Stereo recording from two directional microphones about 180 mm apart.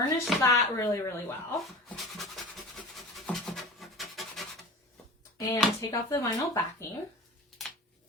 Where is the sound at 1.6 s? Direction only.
Centre (ahead or behind).